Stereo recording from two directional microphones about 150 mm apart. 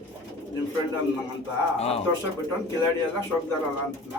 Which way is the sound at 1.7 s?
45° left (ahead or behind).